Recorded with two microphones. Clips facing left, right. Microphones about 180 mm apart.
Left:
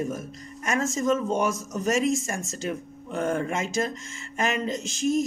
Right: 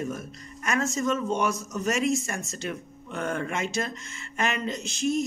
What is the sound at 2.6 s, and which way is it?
Speech, 35° left (ahead or behind).